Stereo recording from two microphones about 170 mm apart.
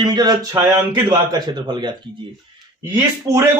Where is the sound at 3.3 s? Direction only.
25° right (ahead or behind).